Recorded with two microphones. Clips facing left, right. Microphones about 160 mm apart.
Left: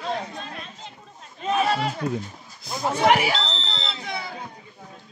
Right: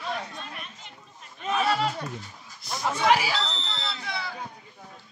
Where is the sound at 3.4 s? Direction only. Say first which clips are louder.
Left 2 dB; 25° left (ahead or behind).